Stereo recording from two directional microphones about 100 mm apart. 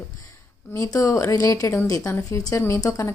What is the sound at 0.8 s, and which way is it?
Speech, 35° left (ahead or behind).